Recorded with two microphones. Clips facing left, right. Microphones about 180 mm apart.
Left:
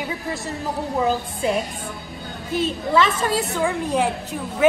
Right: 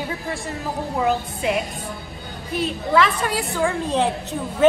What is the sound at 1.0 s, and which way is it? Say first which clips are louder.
A woman's voice: even; 35° left (ahead or behind).